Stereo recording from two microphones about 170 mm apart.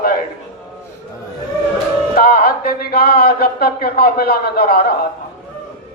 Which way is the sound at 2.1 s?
60° left (ahead or behind).